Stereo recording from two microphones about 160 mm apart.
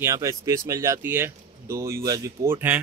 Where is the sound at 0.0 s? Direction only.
20° right (ahead or behind).